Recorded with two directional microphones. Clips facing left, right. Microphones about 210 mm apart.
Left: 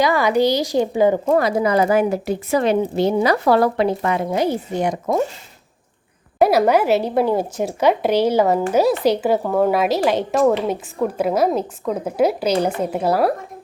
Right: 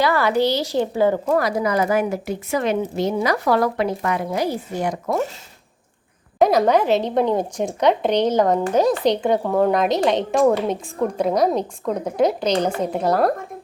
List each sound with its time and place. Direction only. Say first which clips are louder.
0.0 s a woman's voice: left 2 dB; 15° left (ahead or behind)
6.4 s speech: left 1 dB; 5° left (ahead or behind)